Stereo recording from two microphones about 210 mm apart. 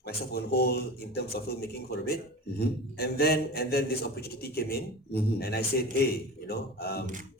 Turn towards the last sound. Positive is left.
turn(degrees=50)  # may be behind; listen again after turning